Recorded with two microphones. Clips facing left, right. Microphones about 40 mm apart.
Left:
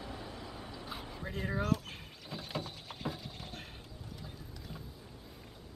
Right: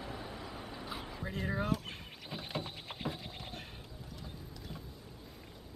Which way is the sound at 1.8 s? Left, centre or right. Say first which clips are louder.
Right 2 dB; centre.